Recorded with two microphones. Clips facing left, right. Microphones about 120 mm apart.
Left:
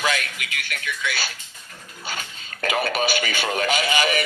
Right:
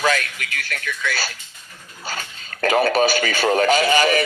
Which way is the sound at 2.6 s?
40° right (ahead or behind).